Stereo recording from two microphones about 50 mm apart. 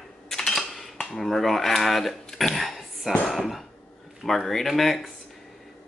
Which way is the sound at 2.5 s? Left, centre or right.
Centre.